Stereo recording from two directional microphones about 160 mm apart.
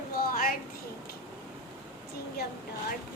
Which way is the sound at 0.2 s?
65° left (ahead or behind).